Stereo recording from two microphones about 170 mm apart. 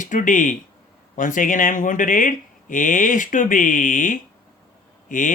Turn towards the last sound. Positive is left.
turn(degrees=50)  # may be behind; listen again after turning